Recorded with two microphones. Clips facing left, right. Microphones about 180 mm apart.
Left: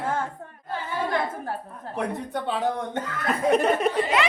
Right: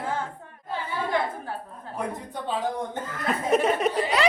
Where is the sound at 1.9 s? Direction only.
70° left (ahead or behind).